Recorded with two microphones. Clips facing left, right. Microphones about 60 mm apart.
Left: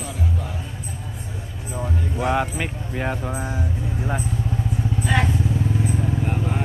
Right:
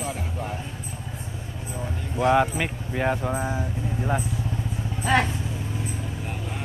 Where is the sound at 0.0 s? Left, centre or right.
Right.